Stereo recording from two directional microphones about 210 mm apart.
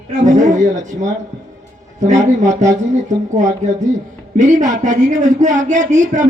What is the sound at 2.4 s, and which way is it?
Speech, 35° right (ahead or behind).